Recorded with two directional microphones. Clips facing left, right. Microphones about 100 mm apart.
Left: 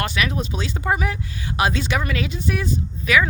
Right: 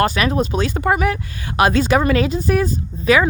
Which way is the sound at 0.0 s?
40° right (ahead or behind).